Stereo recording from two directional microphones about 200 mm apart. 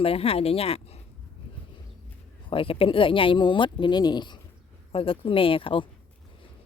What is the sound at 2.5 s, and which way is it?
A woman's voice, 25° left (ahead or behind).